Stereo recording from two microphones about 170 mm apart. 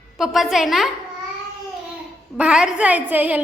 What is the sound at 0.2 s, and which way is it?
Speech, centre (ahead or behind).